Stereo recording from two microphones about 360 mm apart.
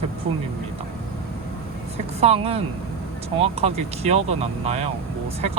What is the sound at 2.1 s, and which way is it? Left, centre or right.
Speech, centre.